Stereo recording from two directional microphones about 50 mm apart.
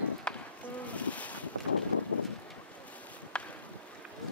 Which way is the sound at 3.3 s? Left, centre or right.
Centre.